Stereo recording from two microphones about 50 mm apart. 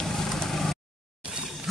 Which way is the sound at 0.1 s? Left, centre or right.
Centre.